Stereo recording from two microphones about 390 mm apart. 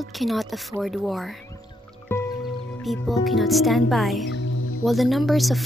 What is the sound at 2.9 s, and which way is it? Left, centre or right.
A woman's voice, centre.